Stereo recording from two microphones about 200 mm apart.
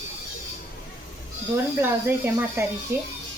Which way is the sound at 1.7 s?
10° right (ahead or behind).